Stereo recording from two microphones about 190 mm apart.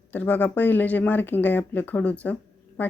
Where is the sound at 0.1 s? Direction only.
10° left (ahead or behind).